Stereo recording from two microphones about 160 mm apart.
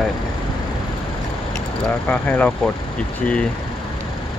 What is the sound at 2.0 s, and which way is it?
Speech, 10° left (ahead or behind).